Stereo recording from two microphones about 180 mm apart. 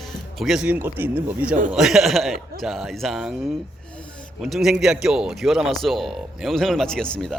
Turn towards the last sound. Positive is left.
turn(degrees=5)  # may be behind; listen again after turning